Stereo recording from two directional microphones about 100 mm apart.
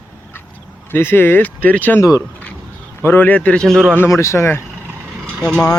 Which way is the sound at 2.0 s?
30° left (ahead or behind).